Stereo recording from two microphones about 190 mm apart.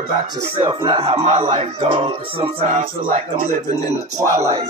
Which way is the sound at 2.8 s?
45° right (ahead or behind).